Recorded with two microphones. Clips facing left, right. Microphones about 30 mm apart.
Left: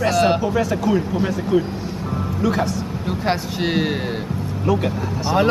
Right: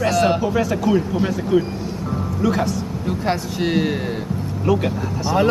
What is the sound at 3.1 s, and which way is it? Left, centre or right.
Speech, centre.